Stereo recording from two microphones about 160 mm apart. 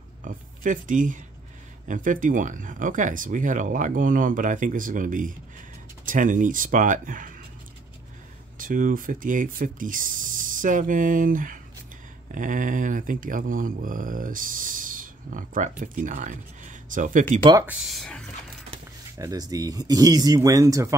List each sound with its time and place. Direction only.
0.2 s speech: 55° right (ahead or behind)
8.5 s speech: 55° right (ahead or behind)
17.4 s speech: 25° right (ahead or behind)
17.6 s speech: 5° right (ahead or behind)
19.1 s speech: 20° right (ahead or behind)